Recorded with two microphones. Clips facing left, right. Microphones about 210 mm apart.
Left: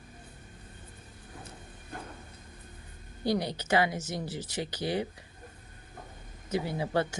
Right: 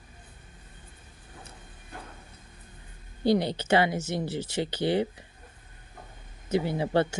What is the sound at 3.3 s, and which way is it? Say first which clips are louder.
Speech: right 5 dB; 25° right (ahead or behind).